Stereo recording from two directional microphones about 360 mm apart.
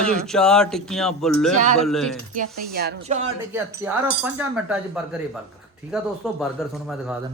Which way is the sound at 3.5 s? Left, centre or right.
Centre.